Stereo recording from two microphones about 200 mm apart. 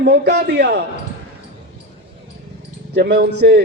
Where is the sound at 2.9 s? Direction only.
55° right (ahead or behind).